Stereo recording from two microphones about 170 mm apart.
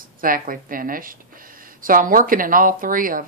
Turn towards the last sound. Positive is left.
turn(degrees=-55)  # may be behind; listen again after turning